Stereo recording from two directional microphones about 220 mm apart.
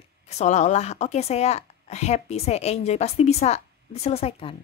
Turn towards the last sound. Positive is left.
turn(degrees=25)  # may be behind; listen again after turning